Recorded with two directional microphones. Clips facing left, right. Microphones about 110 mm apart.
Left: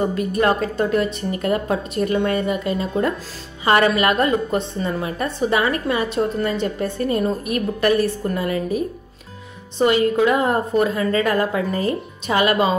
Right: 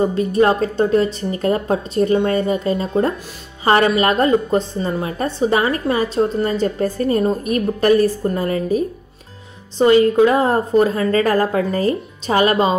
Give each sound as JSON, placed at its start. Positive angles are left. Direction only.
{"t": 0.1, "sound": "a woman's voice", "side_deg": -30}
{"t": 8.2, "sound": "a woman's voice", "side_deg": -25}
{"t": 8.5, "sound": "a woman's voice", "side_deg": -35}